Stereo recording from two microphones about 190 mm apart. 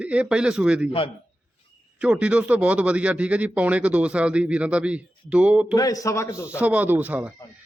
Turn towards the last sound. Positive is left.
turn(degrees=-10)  # may be behind; listen again after turning